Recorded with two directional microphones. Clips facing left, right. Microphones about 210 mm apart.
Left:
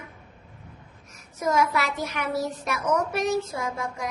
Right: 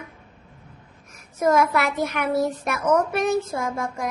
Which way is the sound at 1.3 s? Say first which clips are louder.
Right 4 dB; 55° right (ahead or behind).